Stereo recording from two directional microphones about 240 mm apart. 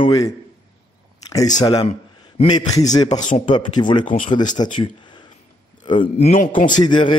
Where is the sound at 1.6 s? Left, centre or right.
Centre.